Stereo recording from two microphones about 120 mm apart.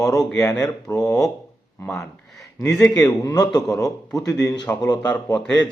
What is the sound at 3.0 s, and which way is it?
A man's voice, 30° left (ahead or behind).